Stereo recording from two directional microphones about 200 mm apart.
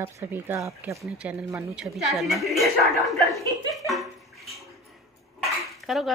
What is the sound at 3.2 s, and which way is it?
Speech, 15° left (ahead or behind).